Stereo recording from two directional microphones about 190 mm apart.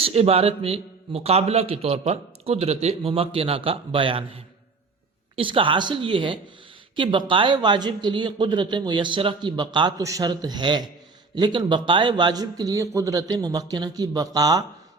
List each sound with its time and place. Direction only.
0.0 s a man's voice: 30° right (ahead or behind)
5.4 s speech: 25° right (ahead or behind)